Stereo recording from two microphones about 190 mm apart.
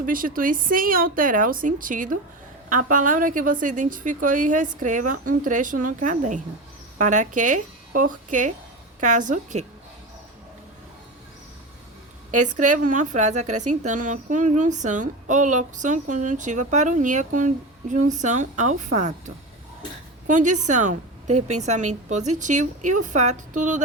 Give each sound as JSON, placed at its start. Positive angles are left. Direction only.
{"t": 0.0, "sound": "a woman's voice", "side_deg": -45}
{"t": 12.3, "sound": "a woman's voice", "side_deg": -40}